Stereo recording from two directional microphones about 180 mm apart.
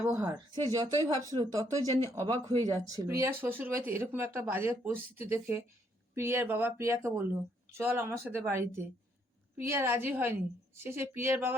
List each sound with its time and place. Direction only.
0.0 s speech: 10° right (ahead or behind)
0.5 s speech: 20° right (ahead or behind)